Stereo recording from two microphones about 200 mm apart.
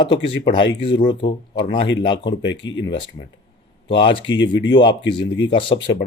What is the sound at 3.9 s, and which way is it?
Speech, 25° left (ahead or behind).